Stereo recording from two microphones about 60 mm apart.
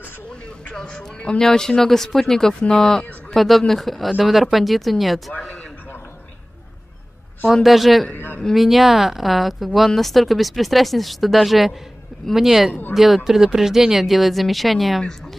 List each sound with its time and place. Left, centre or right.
0.7 s speech: centre
7.4 s speech: centre
8.1 s a woman's voice: left
8.5 s speech: centre